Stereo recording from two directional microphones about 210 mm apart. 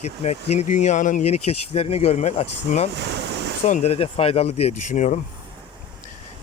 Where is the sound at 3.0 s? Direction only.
55° right (ahead or behind).